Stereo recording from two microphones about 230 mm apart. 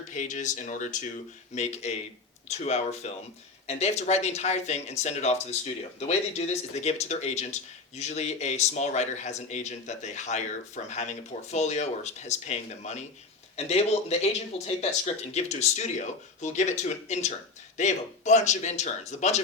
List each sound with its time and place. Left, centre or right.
0.1 s speech: left